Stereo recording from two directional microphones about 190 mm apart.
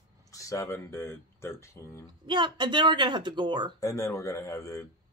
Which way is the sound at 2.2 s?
25° right (ahead or behind).